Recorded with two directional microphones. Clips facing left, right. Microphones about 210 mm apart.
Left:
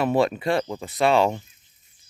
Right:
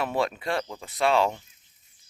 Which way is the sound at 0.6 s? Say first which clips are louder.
Left 8 dB; 15° left (ahead or behind).